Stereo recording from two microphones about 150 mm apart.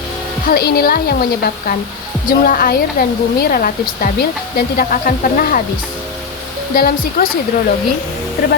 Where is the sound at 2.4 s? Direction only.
80° left.